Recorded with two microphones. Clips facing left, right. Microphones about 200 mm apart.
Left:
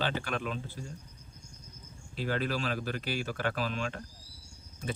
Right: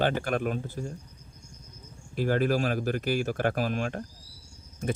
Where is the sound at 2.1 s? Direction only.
50° right (ahead or behind).